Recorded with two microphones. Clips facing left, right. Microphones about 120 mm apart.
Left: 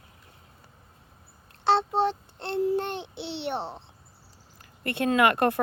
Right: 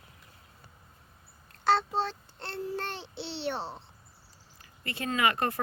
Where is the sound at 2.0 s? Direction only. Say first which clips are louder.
Left 7 dB; 20° left (ahead or behind).